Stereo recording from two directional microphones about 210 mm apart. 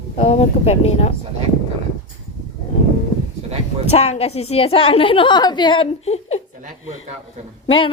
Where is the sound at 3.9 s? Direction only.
30° left (ahead or behind).